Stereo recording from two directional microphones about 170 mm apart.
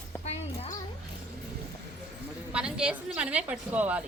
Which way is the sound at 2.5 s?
5° right (ahead or behind).